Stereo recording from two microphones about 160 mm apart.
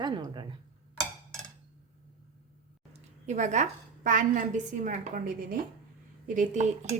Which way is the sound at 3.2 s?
50° right (ahead or behind).